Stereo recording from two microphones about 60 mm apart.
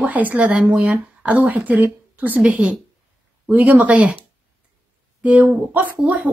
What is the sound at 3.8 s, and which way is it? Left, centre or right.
Speech, right.